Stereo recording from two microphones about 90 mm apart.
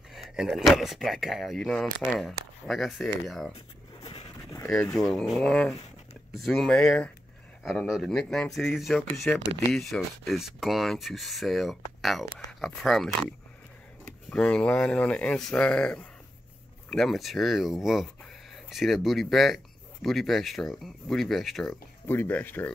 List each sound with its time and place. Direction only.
0.1 s speech: 5° right (ahead or behind)
4.0 s a sound: 90° left
4.9 s speech: 5° left (ahead or behind)
7.6 s speech: 5° right (ahead or behind)
22.0 s speech: 25° left (ahead or behind)